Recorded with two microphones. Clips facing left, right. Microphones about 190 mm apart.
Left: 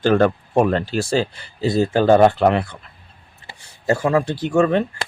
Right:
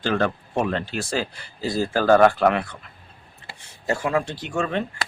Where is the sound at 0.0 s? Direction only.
45° left (ahead or behind); by 2.6 s 25° left (ahead or behind).